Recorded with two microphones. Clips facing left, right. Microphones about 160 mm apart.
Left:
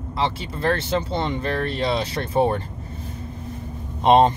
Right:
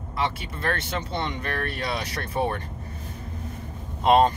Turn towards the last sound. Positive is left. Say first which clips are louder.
# left 3 dB
turn(degrees=25)  # may be behind; listen again after turning